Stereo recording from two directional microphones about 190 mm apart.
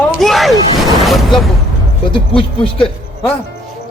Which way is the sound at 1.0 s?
Centre (ahead or behind).